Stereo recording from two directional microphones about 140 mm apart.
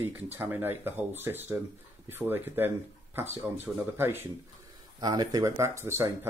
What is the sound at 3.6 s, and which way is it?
Speech, 15° right (ahead or behind).